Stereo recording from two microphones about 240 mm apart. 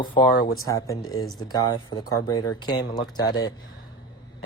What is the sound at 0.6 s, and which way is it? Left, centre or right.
Speech, centre.